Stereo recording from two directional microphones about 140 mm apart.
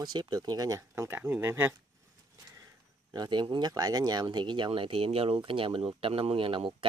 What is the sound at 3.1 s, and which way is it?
Speech, 30° right (ahead or behind).